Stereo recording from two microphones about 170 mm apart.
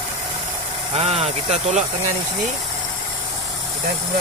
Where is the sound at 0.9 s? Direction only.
35° right (ahead or behind).